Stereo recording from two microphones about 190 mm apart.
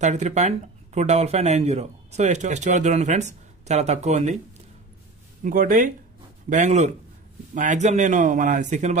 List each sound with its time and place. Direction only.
0.0 s speech: 40° right (ahead or behind)
5.4 s speech: 45° right (ahead or behind)